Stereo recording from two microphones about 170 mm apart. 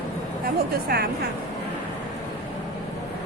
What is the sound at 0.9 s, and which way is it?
Speech, 65° right (ahead or behind).